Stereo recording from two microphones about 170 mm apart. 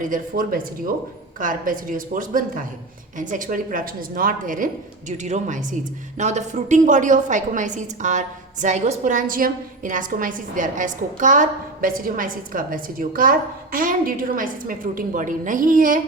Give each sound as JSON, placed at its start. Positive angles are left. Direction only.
{"t": 0.0, "sound": "a woman's voice", "side_deg": -55}